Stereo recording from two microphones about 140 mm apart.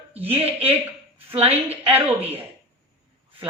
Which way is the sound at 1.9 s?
15° right (ahead or behind).